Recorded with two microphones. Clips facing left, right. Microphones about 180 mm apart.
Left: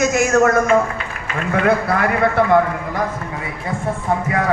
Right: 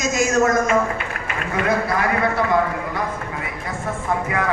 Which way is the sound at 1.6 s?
60° left (ahead or behind).